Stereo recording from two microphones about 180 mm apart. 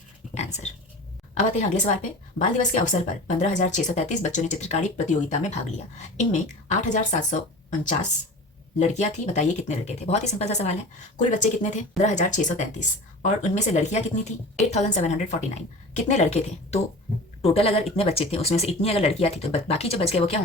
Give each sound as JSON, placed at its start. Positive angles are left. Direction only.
{"t": 0.3, "sound": "dog", "side_deg": 40}
{"t": 1.4, "sound": "speech", "side_deg": 40}
{"t": 8.8, "sound": "speech", "side_deg": 40}